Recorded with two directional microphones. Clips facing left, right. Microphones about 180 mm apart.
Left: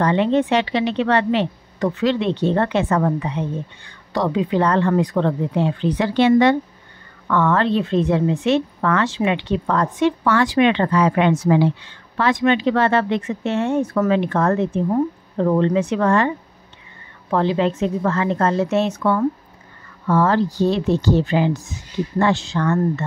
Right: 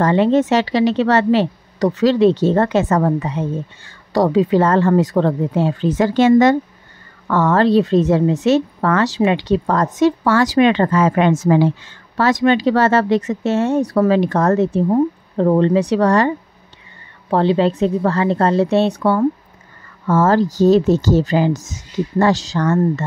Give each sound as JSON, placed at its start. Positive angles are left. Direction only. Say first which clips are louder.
{"t": 0.0, "sound": "a woman's voice", "louder": "right 3 dB", "side_deg": -40}
{"t": 17.3, "sound": "a woman's voice", "louder": "right 4 dB", "side_deg": -35}